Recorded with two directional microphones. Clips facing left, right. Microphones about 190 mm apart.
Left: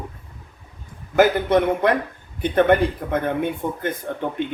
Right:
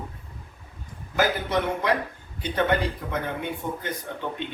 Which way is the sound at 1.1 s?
55° left (ahead or behind).